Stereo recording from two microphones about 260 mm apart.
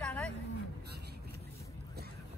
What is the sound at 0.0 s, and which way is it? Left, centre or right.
Vehicle, centre.